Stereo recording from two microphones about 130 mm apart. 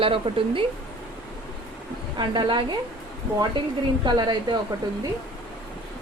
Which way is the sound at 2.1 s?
35° right (ahead or behind).